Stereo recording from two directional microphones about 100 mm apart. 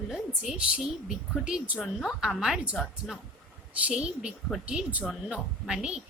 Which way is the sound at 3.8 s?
10° right (ahead or behind).